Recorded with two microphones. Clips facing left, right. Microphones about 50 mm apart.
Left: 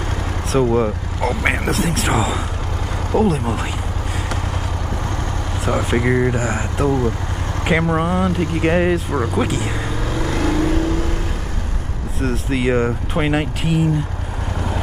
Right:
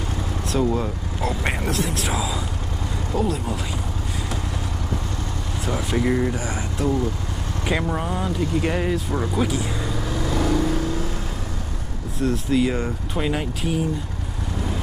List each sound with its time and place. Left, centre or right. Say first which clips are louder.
0.7 s speech: left 6 dB; left
5.7 s speech: left 4 dB; left
7.6 s speech: left 7 dB; left
9.4 s vehicle: left 3 dB; left
12.2 s speech: even; left